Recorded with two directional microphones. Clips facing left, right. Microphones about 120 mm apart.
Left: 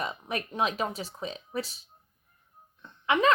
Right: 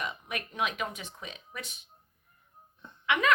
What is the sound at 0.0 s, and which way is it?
Speech, 35° left (ahead or behind).